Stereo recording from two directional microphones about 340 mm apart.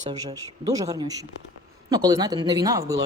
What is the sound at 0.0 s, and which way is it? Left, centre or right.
A man's voice, centre.